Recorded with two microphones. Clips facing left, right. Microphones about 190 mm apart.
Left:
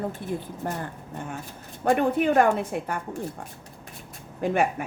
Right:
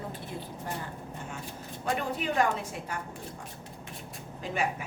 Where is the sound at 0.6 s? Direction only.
50° left (ahead or behind).